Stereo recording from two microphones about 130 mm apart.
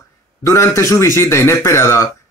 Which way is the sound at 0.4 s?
20° left (ahead or behind).